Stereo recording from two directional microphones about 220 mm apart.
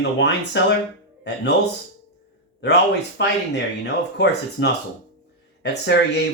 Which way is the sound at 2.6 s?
50° left (ahead or behind).